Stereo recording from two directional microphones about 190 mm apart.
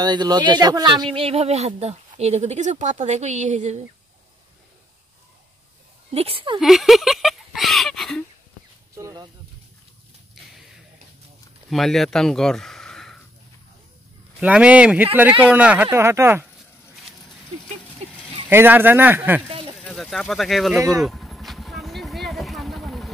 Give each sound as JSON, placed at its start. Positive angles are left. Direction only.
{"t": 0.0, "sound": "speech", "side_deg": -20}
{"t": 6.1, "sound": "speech", "side_deg": -30}
{"t": 6.6, "sound": "speech", "side_deg": 0}
{"t": 8.9, "sound": "a sound", "side_deg": -20}
{"t": 11.7, "sound": "speech", "side_deg": 0}
{"t": 14.4, "sound": "speech", "side_deg": -5}
{"t": 18.5, "sound": "speech", "side_deg": -10}
{"t": 19.8, "sound": "speech", "side_deg": 0}
{"t": 20.7, "sound": "speech", "side_deg": -15}
{"t": 21.0, "sound": "vehicle", "side_deg": 0}